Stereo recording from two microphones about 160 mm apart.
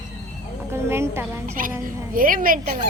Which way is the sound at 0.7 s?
15° right (ahead or behind).